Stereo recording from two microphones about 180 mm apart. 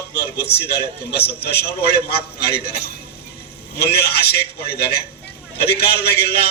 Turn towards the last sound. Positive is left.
turn(degrees=65)  # may be behind; listen again after turning